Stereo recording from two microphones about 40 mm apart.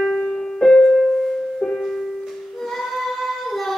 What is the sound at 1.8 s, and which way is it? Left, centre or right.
Music, centre.